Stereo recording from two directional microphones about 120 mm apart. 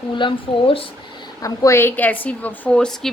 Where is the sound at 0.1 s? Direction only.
45° left (ahead or behind).